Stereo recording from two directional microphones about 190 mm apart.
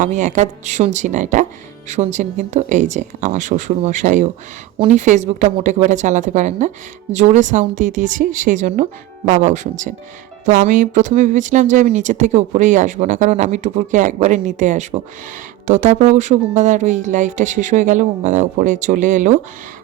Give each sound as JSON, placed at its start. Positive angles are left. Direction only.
{"t": 0.0, "sound": "speech", "side_deg": -40}